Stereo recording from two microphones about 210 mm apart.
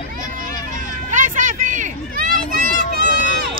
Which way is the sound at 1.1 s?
35° right (ahead or behind).